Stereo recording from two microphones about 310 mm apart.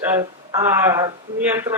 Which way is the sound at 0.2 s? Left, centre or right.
Centre.